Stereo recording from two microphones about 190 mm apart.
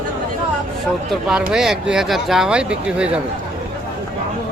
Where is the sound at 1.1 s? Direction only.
5° right (ahead or behind).